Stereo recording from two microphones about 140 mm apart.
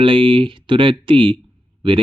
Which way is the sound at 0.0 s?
40° right (ahead or behind).